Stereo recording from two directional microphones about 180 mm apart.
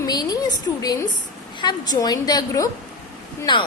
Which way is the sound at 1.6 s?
20° left (ahead or behind).